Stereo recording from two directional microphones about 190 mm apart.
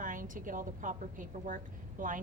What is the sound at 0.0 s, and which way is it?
A woman's voice, 45° right (ahead or behind).